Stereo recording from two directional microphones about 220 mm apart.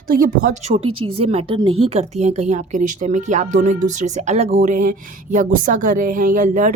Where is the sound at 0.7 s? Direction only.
25° right (ahead or behind).